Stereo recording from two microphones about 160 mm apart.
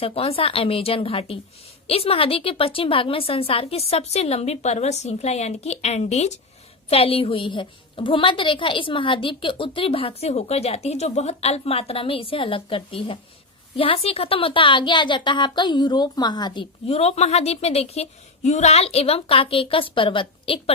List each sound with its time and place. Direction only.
0.0 s a woman's voice: 35° left (ahead or behind)
16.8 s a woman's voice: 40° left (ahead or behind)